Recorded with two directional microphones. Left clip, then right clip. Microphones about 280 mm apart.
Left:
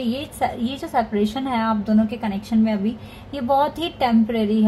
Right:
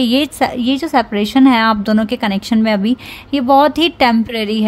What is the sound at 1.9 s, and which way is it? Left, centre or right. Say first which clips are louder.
Speech: right 7 dB; right.